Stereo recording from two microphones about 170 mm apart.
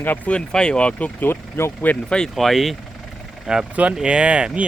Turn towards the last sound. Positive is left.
turn(degrees=-5)  # may be behind; listen again after turning